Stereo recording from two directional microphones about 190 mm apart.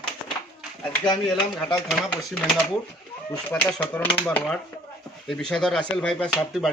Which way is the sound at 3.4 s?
10° left (ahead or behind).